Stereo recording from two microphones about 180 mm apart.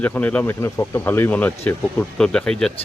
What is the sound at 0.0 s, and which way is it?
Speech, 10° left (ahead or behind).